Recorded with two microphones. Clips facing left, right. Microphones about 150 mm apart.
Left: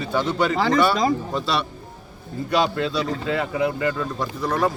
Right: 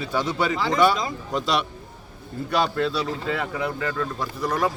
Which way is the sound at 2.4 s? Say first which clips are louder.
Left 1 dB; centre (ahead or behind).